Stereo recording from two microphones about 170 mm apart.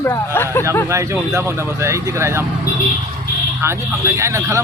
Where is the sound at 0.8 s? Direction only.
15° right (ahead or behind).